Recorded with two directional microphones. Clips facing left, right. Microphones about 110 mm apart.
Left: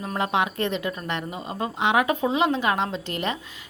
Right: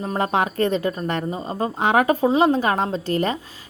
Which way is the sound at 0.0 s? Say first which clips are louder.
Right 3 dB; 35° right (ahead or behind).